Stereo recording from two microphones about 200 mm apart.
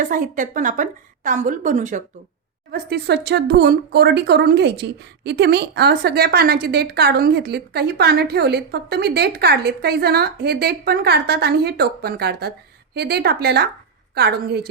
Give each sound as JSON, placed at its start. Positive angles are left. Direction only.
{"t": 0.0, "sound": "a woman's voice", "side_deg": -40}
{"t": 2.7, "sound": "speech", "side_deg": -55}